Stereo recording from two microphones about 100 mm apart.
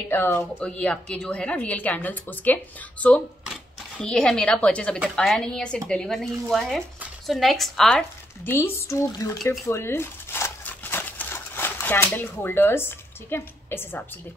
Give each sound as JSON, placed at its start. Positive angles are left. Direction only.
{"t": 0.1, "sound": "a woman's voice", "side_deg": 20}
{"t": 8.5, "sound": "speech", "side_deg": 25}
{"t": 9.5, "sound": "crumpling", "side_deg": 25}